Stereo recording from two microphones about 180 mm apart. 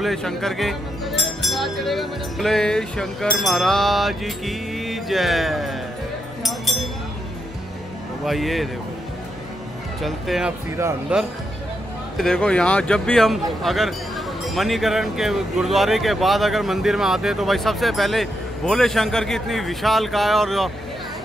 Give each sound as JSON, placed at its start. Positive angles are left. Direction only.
{"t": 0.0, "sound": "speech", "side_deg": 0}
{"t": 6.4, "sound": "a sound", "side_deg": 0}
{"t": 8.3, "sound": "speech", "side_deg": 0}
{"t": 10.0, "sound": "speech", "side_deg": 0}
{"t": 10.8, "sound": "speech", "side_deg": -15}
{"t": 12.2, "sound": "speech", "side_deg": 5}